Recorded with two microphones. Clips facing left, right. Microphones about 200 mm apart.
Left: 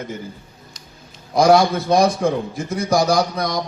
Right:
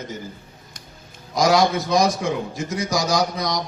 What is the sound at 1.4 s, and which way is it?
Speech, 55° left (ahead or behind).